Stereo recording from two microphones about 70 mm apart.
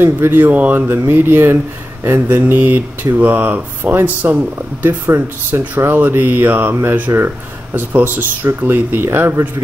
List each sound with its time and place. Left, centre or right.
0.0 s speech: right